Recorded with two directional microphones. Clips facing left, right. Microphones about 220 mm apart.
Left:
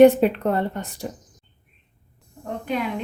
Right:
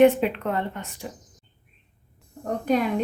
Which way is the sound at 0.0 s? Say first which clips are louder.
Left 4 dB; 40° left (ahead or behind).